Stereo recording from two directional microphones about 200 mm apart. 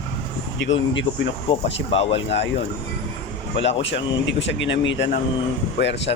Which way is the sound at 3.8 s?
65° left (ahead or behind).